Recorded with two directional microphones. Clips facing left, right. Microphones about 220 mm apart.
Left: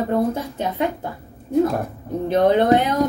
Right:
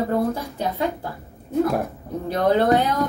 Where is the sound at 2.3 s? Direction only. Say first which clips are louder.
Left 3 dB; 20° left (ahead or behind).